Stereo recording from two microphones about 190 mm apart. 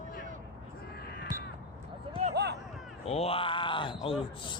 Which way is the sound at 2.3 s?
60° right (ahead or behind).